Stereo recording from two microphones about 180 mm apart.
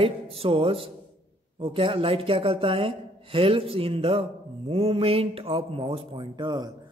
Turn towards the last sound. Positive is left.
turn(degrees=-25)  # may be behind; listen again after turning